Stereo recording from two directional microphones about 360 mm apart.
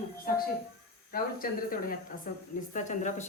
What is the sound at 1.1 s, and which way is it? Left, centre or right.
Speech, left.